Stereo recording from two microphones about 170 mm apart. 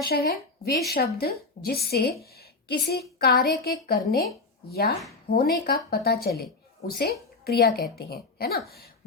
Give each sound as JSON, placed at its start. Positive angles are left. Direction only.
{"t": 0.0, "sound": "a woman's voice", "side_deg": 70}
{"t": 2.3, "sound": "a sound", "side_deg": 65}
{"t": 3.2, "sound": "a woman's voice", "side_deg": 65}